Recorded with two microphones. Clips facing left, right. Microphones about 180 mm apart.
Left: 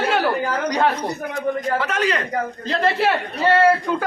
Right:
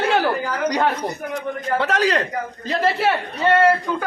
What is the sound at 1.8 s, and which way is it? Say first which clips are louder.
Speech: right 2 dB; 35° right (ahead or behind).